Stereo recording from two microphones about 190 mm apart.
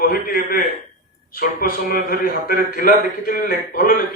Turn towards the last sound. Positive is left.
turn(degrees=50)  # may be behind; listen again after turning